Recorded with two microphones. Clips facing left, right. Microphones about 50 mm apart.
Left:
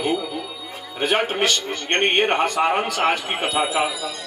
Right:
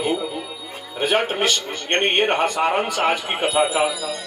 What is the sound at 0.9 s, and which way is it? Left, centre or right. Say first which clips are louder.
A man's voice: right 1 dB; centre.